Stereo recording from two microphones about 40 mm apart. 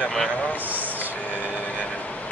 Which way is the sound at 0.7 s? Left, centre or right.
Right.